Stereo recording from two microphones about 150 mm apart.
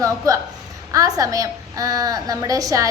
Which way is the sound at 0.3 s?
20° right (ahead or behind).